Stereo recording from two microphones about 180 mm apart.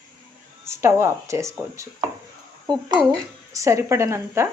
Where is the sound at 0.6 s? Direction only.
15° right (ahead or behind).